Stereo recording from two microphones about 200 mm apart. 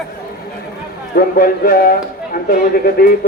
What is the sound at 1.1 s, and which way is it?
Speech, 45° left (ahead or behind).